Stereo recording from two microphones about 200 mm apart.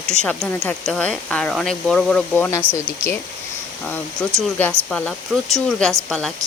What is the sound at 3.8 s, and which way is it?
Speech, 5° left (ahead or behind).